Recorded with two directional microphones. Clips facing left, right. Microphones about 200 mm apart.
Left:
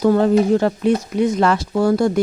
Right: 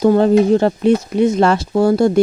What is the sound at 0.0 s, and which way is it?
Speech, 25° right (ahead or behind).